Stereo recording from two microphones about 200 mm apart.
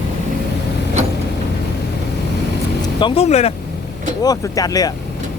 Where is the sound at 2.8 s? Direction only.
25° left (ahead or behind).